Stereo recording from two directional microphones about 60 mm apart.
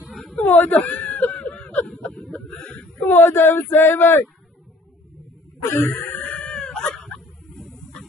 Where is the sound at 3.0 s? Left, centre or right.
Left.